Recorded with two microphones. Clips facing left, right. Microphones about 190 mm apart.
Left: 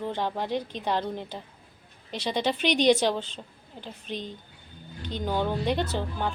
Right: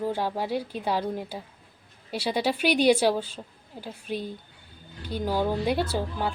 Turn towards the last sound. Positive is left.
turn(degrees=-10)  # may be behind; listen again after turning